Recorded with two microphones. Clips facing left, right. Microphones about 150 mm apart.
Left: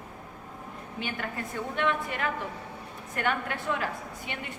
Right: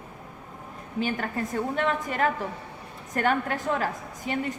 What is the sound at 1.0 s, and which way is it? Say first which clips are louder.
A woman's voice: right 7 dB; 40° right (ahead or behind).